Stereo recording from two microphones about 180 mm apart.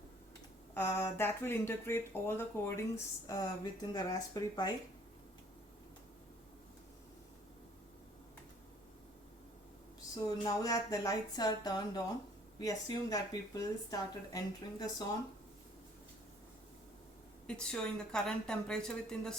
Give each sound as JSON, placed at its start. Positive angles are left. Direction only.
{"t": 0.7, "sound": "speech", "side_deg": 15}
{"t": 10.2, "sound": "speech", "side_deg": 20}
{"t": 17.4, "sound": "a woman's voice", "side_deg": 5}